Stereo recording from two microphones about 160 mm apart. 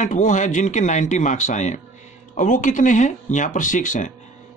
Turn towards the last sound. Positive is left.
turn(degrees=50)  # may be behind; listen again after turning